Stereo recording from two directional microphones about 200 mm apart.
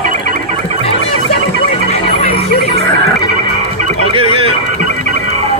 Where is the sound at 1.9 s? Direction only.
35° left (ahead or behind).